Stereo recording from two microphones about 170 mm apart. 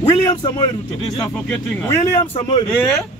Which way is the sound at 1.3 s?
5° left (ahead or behind).